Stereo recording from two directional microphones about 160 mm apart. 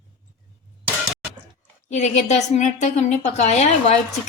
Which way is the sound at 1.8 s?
45° left (ahead or behind).